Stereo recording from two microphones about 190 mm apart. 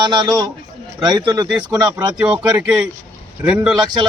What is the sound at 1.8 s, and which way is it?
Speech, 20° right (ahead or behind).